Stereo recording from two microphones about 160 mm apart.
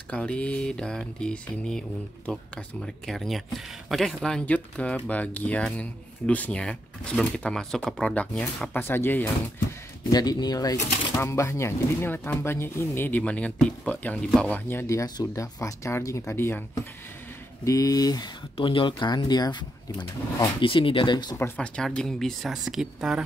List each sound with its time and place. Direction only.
0.1 s mantra: 5° left (ahead or behind)
10.1 s speech: 25° left (ahead or behind)
11.1 s mantra: 20° left (ahead or behind)
17.6 s speech: 20° left (ahead or behind)
21.4 s speech: 5° left (ahead or behind)